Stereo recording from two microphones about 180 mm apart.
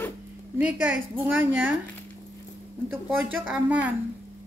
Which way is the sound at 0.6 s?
10° right (ahead or behind).